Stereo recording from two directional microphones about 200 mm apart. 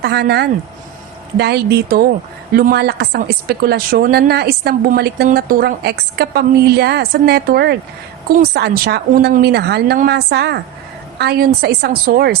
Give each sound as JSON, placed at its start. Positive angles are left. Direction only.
{"t": 0.0, "sound": "speech", "side_deg": -55}